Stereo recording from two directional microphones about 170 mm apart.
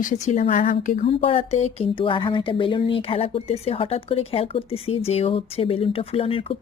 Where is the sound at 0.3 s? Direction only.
45° left (ahead or behind).